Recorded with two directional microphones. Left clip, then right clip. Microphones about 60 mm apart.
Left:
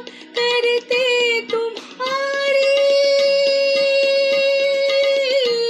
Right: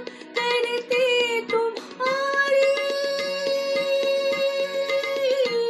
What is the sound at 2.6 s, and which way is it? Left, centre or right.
Music, right.